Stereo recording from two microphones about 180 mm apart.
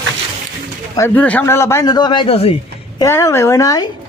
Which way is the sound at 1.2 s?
10° left (ahead or behind).